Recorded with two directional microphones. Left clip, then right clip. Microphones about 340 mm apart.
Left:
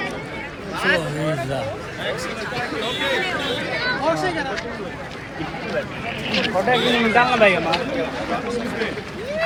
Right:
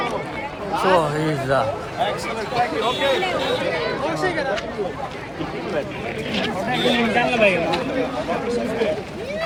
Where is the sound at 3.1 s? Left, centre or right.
Centre.